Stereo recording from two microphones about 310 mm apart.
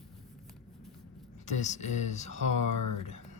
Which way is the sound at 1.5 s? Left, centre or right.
Left.